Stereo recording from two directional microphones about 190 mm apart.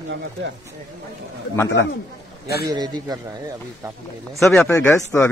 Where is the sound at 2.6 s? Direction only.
20° right (ahead or behind).